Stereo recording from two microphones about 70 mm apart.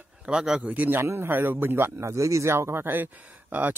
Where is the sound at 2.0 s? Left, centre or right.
Right.